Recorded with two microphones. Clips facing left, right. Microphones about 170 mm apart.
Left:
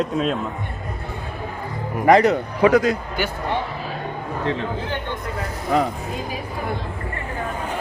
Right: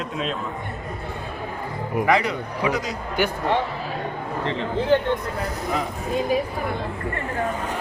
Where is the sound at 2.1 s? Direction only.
45° left (ahead or behind).